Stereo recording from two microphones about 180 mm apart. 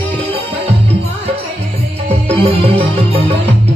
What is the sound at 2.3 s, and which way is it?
Music, 30° right (ahead or behind).